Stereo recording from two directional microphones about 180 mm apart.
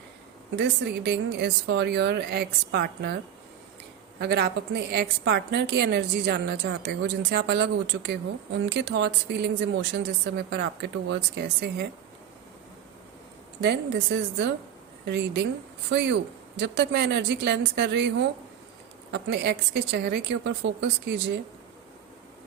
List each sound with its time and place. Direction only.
0.5 s a woman's voice: 70° right (ahead or behind)
4.2 s a woman's voice: 70° right (ahead or behind)
13.6 s a woman's voice: 70° right (ahead or behind)
19.1 s a woman's voice: 70° right (ahead or behind)